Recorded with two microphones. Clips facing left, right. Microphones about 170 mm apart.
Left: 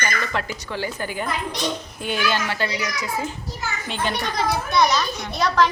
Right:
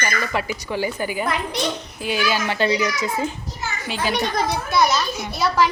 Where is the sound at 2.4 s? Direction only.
20° right (ahead or behind).